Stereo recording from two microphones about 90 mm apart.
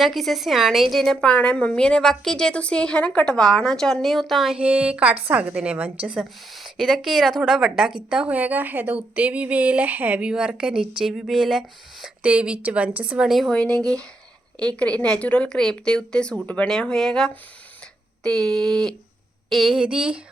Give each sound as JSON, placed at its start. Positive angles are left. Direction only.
{"t": 0.0, "sound": "a woman's voice", "side_deg": 0}
{"t": 6.5, "sound": "a woman's voice", "side_deg": 0}
{"t": 13.5, "sound": "a woman's voice", "side_deg": 10}